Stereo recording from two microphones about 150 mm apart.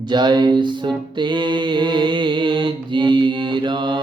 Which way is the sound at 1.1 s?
30° right (ahead or behind).